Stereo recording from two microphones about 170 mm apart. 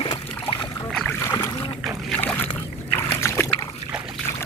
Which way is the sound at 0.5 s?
25° left (ahead or behind).